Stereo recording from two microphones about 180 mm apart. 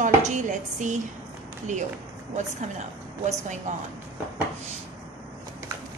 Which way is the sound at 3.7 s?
40° right (ahead or behind).